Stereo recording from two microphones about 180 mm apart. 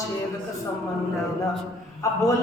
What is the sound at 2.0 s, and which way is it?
Speech, 15° left (ahead or behind).